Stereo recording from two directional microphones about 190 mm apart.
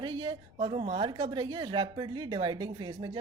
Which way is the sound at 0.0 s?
25° right (ahead or behind).